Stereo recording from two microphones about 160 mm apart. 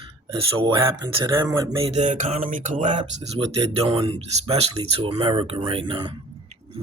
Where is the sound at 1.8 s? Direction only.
45° right (ahead or behind).